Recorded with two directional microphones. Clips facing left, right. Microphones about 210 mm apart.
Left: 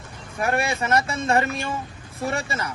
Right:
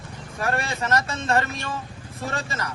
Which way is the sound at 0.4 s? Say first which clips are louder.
Left 3 dB; 15° left (ahead or behind).